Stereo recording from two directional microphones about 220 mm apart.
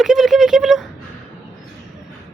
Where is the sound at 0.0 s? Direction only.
Centre (ahead or behind).